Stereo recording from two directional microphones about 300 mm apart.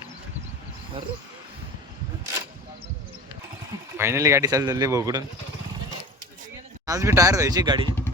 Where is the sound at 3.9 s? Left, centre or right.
Centre.